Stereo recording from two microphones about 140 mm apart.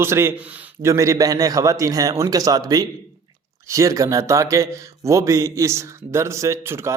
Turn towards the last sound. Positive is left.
turn(degrees=-20)  # may be behind; listen again after turning